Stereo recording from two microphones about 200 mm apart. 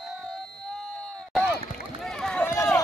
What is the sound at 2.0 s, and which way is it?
Run, centre (ahead or behind).